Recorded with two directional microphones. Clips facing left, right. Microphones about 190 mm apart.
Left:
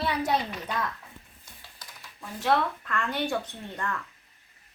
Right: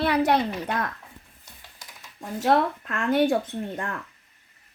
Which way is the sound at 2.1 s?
45° right (ahead or behind).